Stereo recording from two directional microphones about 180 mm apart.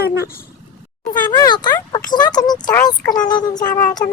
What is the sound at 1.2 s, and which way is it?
Speech, 25° left (ahead or behind).